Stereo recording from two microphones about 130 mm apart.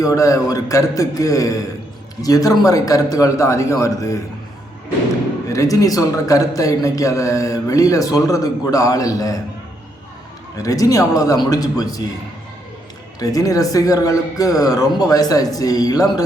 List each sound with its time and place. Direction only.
0.0 s speech: 25° left (ahead or behind)
5.5 s speech: 25° left (ahead or behind)
10.6 s speech: 25° left (ahead or behind)
13.1 s speech: 25° left (ahead or behind)